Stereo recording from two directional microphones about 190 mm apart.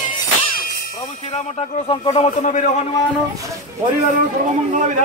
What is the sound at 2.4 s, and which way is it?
Speech, 40° left (ahead or behind).